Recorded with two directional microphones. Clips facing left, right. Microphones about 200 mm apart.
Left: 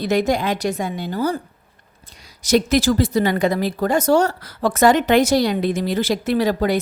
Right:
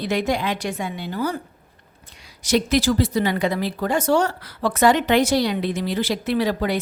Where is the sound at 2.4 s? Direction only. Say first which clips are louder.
Left 3 dB; 45° left (ahead or behind).